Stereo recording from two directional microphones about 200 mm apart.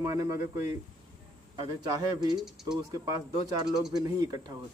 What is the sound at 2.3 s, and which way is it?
Speech, centre (ahead or behind).